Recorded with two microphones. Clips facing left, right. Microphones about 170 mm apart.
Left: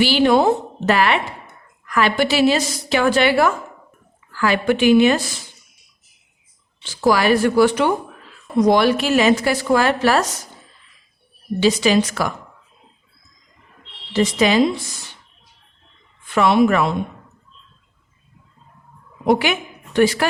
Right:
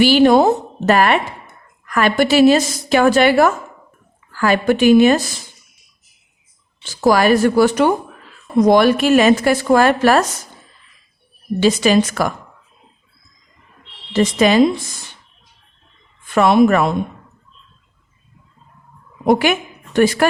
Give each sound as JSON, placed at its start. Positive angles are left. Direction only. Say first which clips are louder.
{"t": 0.0, "sound": "a woman's voice", "louder": "right 4 dB", "side_deg": -45}
{"t": 6.8, "sound": "a woman's voice", "louder": "right 3 dB", "side_deg": -45}
{"t": 11.6, "sound": "a woman's voice", "louder": "right 2 dB", "side_deg": -50}
{"t": 14.1, "sound": "a woman's voice", "louder": "right 3 dB", "side_deg": -50}
{"t": 16.2, "sound": "speech", "louder": "right 3 dB", "side_deg": -45}
{"t": 19.2, "sound": "a woman's voice", "louder": "right 3 dB", "side_deg": -45}